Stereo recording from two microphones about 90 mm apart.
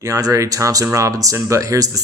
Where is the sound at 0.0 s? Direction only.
40° right (ahead or behind).